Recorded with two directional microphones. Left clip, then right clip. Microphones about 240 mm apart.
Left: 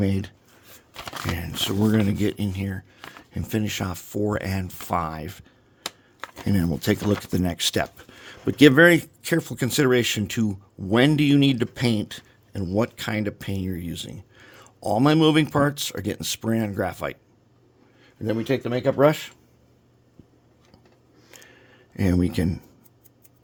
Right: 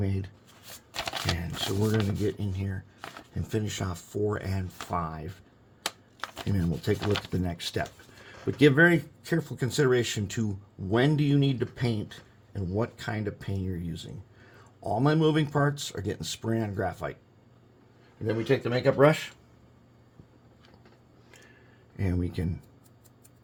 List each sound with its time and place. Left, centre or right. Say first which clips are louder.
0.0 s speech: left 9 dB; left
1.4 s speech: left 5 dB; left
5.8 s shuffling cards: even; centre
6.5 s speech: left 7 dB; left
18.3 s speech: left 2 dB; left
21.2 s a sound: left 6 dB; left